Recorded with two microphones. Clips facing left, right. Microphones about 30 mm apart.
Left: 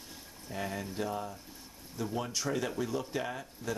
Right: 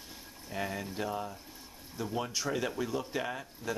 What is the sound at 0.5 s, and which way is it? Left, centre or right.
Speech, centre.